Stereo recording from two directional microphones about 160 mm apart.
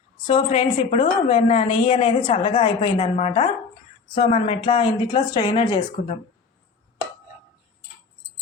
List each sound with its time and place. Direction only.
0.3 s a woman's voice: 35° left (ahead or behind)